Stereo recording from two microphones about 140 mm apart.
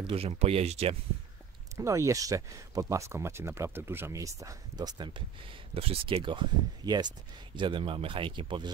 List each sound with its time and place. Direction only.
0.0 s speech: 45° right (ahead or behind)
1.8 s speech: 20° right (ahead or behind)
5.8 s speech: 45° right (ahead or behind)